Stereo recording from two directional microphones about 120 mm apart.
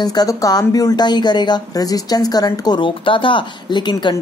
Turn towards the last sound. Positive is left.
turn(degrees=40)  # may be behind; listen again after turning